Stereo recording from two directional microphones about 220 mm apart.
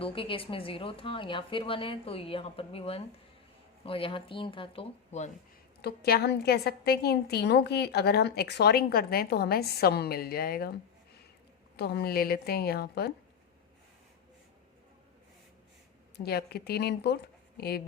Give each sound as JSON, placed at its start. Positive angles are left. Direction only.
{"t": 0.0, "sound": "a woman's voice", "side_deg": 25}
{"t": 5.8, "sound": "a woman's voice", "side_deg": 45}
{"t": 11.8, "sound": "a woman's voice", "side_deg": 50}
{"t": 16.1, "sound": "a woman's voice", "side_deg": 45}